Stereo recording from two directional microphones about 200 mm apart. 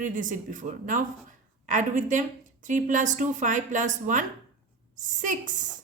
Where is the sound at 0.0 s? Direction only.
40° right (ahead or behind).